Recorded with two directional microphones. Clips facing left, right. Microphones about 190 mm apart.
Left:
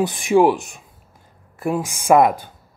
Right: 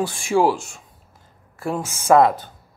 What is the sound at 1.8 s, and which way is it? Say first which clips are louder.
Speech: even; 15° left (ahead or behind).